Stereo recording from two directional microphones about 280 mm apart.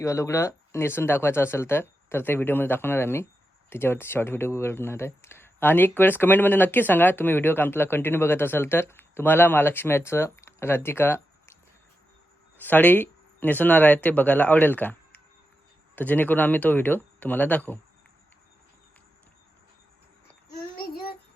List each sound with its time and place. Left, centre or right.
0.0 s speech: centre
12.5 s speech: centre
20.7 s child singing: left